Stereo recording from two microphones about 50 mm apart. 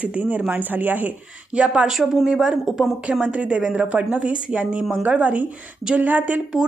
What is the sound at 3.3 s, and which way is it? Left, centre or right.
Speech, right.